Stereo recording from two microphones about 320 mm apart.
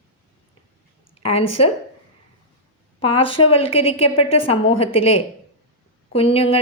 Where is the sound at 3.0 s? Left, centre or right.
Centre.